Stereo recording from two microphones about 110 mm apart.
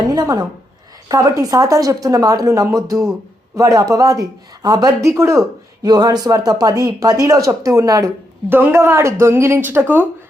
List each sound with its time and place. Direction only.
0.1 s a woman's voice: 35° right (ahead or behind)
5.8 s speech: 35° right (ahead or behind)
8.4 s speech: 20° right (ahead or behind)